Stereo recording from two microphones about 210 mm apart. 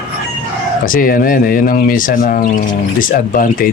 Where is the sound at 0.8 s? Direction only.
40° left (ahead or behind).